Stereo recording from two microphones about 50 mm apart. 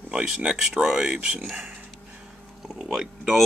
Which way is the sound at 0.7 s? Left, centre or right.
Centre.